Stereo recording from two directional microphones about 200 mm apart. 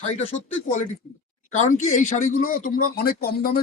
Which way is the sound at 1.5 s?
35° left (ahead or behind).